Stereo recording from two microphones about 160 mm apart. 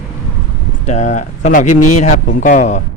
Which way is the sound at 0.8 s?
45° left (ahead or behind).